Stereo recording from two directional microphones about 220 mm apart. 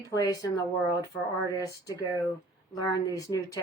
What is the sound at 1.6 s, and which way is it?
Speech, 15° left (ahead or behind).